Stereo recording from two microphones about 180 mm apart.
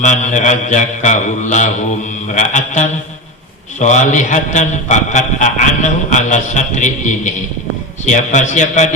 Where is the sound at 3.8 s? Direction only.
40° left (ahead or behind).